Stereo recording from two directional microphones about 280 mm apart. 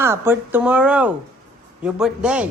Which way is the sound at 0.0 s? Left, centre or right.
Centre.